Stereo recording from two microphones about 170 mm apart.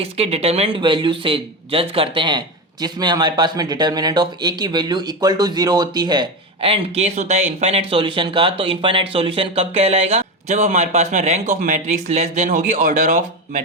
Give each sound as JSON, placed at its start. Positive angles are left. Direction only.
{"t": 0.0, "sound": "speech", "side_deg": -35}